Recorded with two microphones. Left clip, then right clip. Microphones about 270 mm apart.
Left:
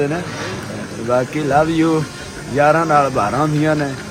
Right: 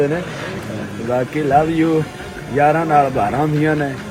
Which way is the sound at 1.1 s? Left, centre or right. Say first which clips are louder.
Even; centre.